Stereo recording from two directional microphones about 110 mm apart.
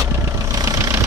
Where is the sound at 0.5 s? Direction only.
35° right (ahead or behind).